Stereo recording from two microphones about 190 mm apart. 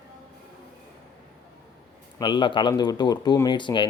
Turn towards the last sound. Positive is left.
turn(degrees=25)  # may be behind; listen again after turning